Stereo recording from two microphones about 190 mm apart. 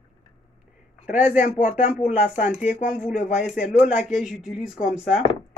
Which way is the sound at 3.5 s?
40° left (ahead or behind).